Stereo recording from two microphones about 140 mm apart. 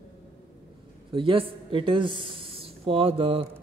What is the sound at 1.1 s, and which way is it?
Speech, 40° right (ahead or behind).